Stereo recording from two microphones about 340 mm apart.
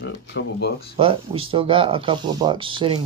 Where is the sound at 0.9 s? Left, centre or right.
Centre.